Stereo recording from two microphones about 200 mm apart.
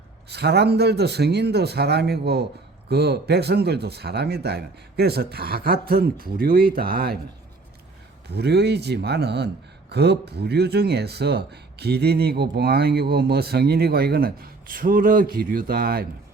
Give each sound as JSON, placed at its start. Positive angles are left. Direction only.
{"t": 0.3, "sound": "speech", "side_deg": -55}
{"t": 8.3, "sound": "speech", "side_deg": -55}